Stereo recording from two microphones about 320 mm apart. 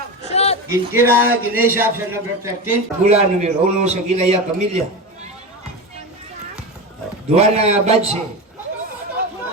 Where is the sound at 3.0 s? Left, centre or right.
Right.